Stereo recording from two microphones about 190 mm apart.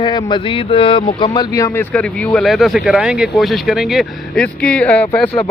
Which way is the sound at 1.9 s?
Centre (ahead or behind).